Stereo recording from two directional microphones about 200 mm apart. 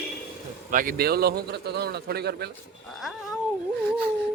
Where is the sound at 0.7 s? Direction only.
45° right (ahead or behind).